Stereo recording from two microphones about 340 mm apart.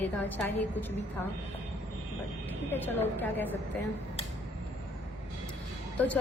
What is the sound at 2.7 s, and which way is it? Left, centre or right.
Speech, centre.